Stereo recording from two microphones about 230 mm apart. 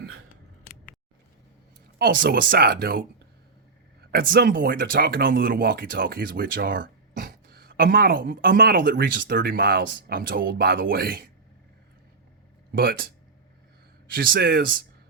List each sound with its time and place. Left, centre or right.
2.0 s speech: right
4.1 s speech: right
12.7 s speech: right
14.1 s speech: right